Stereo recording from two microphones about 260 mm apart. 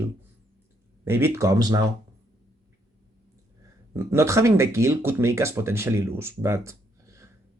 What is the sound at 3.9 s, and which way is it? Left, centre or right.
Speech, centre.